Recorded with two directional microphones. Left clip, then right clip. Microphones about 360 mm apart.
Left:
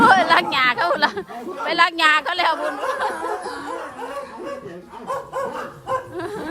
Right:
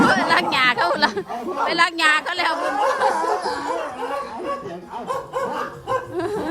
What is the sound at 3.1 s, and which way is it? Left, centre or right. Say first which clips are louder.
Snicker: right 5 dB; centre.